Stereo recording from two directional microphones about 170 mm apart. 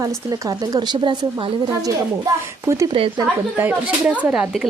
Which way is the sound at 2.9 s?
30° right (ahead or behind).